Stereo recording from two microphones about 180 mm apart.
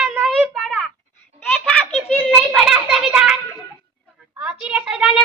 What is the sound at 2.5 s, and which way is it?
Child singing, centre (ahead or behind).